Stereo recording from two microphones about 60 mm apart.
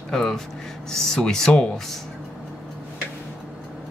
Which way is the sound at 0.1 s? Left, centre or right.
Centre.